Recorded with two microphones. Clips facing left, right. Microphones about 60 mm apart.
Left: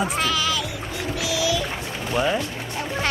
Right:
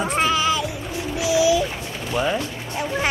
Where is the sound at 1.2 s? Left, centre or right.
Right.